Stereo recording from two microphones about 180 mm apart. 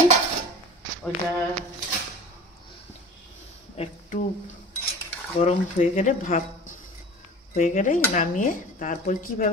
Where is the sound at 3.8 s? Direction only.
45° left (ahead or behind).